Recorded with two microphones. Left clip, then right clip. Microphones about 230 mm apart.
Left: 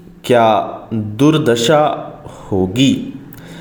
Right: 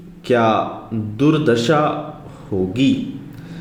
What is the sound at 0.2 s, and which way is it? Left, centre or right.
A man's voice, left.